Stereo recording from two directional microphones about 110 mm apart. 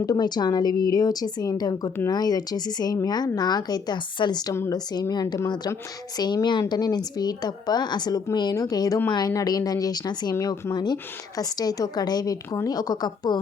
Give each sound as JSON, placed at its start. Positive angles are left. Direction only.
{"t": 0.0, "sound": "speech", "side_deg": 40}